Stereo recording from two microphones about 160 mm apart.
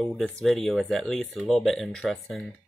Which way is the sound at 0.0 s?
Centre (ahead or behind).